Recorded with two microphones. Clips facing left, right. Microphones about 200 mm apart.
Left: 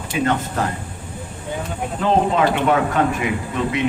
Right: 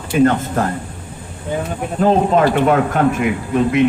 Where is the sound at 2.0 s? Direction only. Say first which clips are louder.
Right 4 dB; 45° right (ahead or behind).